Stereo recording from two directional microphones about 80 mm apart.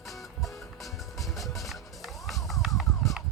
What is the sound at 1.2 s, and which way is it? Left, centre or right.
Music, centre.